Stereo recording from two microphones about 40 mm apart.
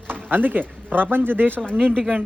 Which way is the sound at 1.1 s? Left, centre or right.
Right.